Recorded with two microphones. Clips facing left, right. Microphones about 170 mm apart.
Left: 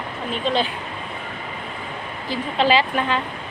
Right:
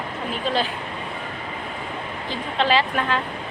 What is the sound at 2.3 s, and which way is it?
Speech, 5° left (ahead or behind).